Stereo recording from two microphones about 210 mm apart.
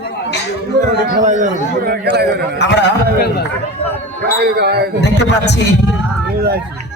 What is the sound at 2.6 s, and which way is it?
Speech, 55° left (ahead or behind).